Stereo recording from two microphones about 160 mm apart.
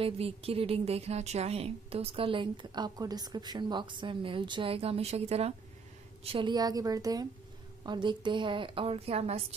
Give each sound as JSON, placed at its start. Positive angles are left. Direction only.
{"t": 0.0, "sound": "speech", "side_deg": -35}
{"t": 6.2, "sound": "a woman's voice", "side_deg": -30}